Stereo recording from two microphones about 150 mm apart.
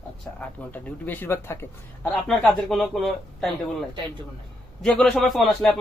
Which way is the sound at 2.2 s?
Centre (ahead or behind).